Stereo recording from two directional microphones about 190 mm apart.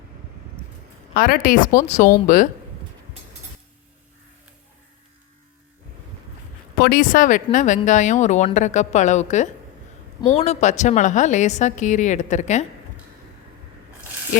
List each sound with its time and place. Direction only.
1.1 s speech: 50° left (ahead or behind)
6.7 s speech: 55° left (ahead or behind)